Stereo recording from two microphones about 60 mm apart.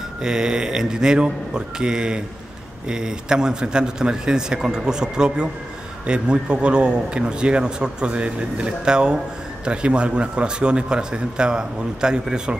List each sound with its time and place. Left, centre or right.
0.2 s a man's voice: centre